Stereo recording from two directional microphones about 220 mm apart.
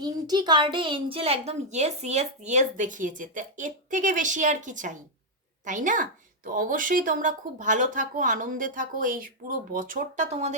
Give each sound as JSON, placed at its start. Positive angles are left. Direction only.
{"t": 0.0, "sound": "a woman's voice", "side_deg": -20}